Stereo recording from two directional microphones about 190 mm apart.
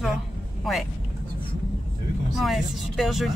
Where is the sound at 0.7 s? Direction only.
Centre (ahead or behind).